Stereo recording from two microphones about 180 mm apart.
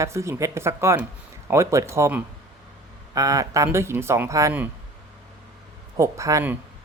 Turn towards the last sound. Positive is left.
turn(degrees=-15)  # may be behind; listen again after turning